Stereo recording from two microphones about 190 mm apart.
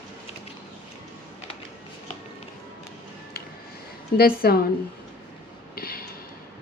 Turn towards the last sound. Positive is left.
turn(degrees=50)  # may be behind; listen again after turning